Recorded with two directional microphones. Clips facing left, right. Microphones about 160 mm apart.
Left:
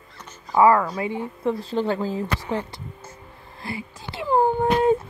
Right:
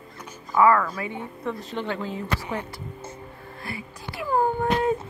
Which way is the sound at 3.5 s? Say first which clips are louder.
Left 4 dB; 25° left (ahead or behind).